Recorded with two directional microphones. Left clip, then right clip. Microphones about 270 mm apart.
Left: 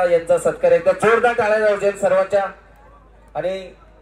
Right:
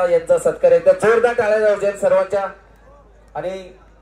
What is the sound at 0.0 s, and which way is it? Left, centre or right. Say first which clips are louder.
Speech: right 1 dB; left.